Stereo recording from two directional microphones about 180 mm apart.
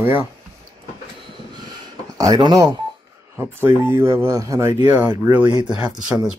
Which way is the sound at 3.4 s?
15° right (ahead or behind).